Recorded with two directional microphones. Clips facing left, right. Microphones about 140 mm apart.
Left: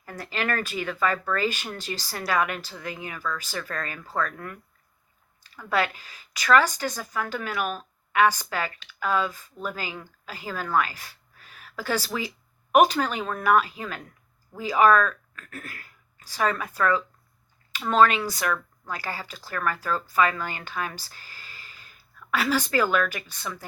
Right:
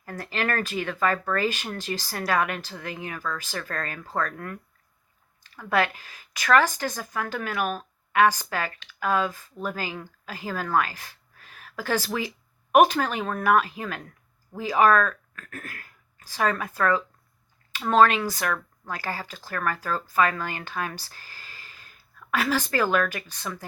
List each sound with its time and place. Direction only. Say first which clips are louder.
0.0 s speech: right 1 dB; 40° right (ahead or behind)